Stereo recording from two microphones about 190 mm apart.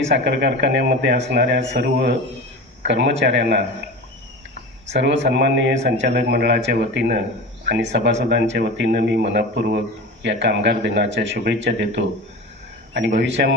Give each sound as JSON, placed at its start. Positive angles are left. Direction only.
{"t": 0.0, "sound": "a man's voice", "side_deg": -65}
{"t": 4.9, "sound": "a man's voice", "side_deg": -70}
{"t": 13.1, "sound": "a man's voice", "side_deg": -70}